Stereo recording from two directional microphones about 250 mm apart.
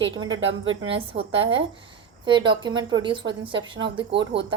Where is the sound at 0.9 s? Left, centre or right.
Right.